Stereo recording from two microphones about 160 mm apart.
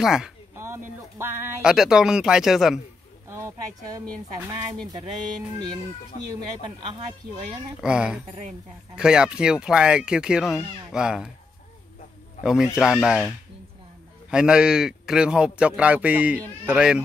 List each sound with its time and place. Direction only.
0.0 s a man's voice: 5° right (ahead or behind)
0.6 s a sound: 15° right (ahead or behind)
1.6 s a man's voice: 5° right (ahead or behind)
3.3 s a sound: 15° right (ahead or behind)
7.8 s a man's voice: 5° right (ahead or behind)
12.4 s a man's voice: 5° right (ahead or behind)
14.3 s a man's voice: 5° right (ahead or behind)